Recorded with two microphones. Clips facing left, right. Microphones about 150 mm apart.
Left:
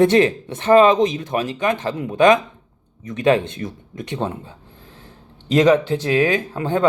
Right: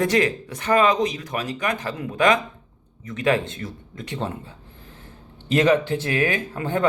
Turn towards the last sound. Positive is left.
turn(degrees=20)  # may be behind; listen again after turning